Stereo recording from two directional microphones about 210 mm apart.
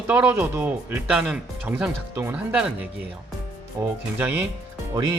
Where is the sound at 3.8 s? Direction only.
15° right (ahead or behind).